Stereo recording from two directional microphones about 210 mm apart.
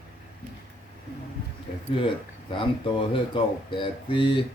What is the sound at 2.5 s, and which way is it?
Speech, 25° left (ahead or behind).